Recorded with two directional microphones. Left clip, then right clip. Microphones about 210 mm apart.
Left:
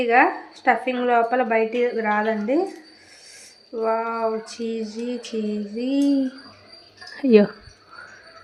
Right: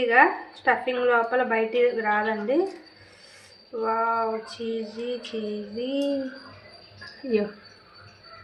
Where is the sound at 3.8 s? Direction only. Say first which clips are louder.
Left 1 dB; 30° left (ahead or behind).